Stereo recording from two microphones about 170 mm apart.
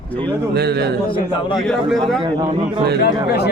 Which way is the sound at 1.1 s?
30° left (ahead or behind).